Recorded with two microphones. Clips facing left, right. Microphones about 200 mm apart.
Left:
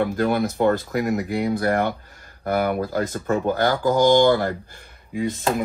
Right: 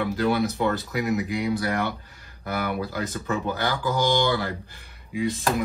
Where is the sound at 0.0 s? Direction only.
50° left (ahead or behind).